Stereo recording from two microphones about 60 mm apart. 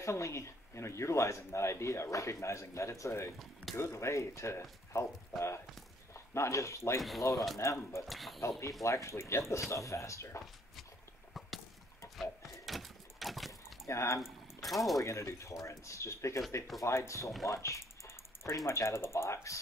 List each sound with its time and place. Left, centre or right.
0.0 s speech: left
6.1 s speech: left
8.1 s speech: centre
8.4 s speech: left
12.2 s a sound: centre
13.8 s speech: left
14.2 s speech: centre
15.0 s speech: left
17.5 s a sound: left
18.7 s speech: left